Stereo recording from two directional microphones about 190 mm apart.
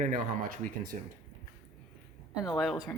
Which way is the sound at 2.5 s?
Centre (ahead or behind).